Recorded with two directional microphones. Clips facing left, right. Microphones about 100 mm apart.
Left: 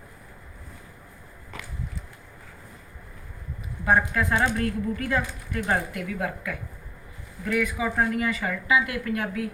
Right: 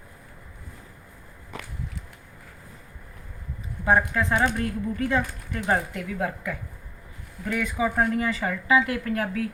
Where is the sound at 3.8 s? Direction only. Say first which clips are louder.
Right 1 dB; 20° right (ahead or behind).